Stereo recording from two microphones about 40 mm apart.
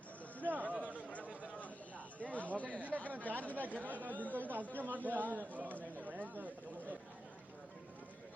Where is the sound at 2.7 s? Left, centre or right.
Right.